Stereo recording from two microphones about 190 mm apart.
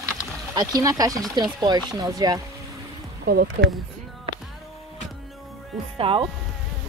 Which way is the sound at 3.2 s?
55° right (ahead or behind).